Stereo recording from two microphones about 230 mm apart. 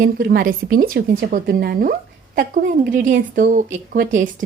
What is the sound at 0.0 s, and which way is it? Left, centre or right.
Speech, right.